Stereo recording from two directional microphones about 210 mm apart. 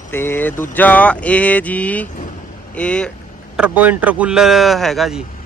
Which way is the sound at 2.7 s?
5° left (ahead or behind).